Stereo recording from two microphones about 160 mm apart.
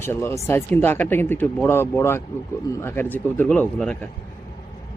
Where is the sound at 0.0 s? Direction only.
15° left (ahead or behind).